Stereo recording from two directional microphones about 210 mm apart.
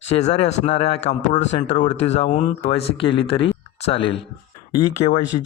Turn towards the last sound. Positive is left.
turn(degrees=30)  # may be behind; listen again after turning